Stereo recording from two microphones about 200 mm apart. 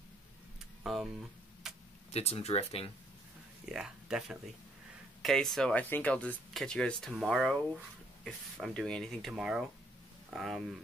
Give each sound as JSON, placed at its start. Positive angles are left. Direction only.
{"t": 0.8, "sound": "a sound", "side_deg": 0}
{"t": 1.6, "sound": "tick-tock", "side_deg": 0}
{"t": 2.1, "sound": "speech", "side_deg": 30}
{"t": 3.6, "sound": "speech", "side_deg": 0}